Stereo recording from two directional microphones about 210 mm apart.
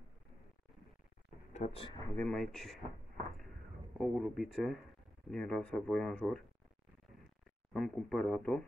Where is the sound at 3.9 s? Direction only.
Centre (ahead or behind).